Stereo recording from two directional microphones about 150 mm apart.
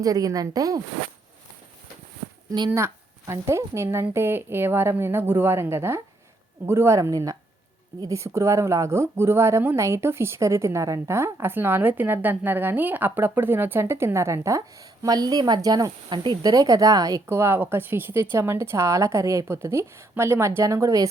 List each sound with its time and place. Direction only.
0.0 s speech: 25° right (ahead or behind)
2.6 s speech: 15° right (ahead or behind)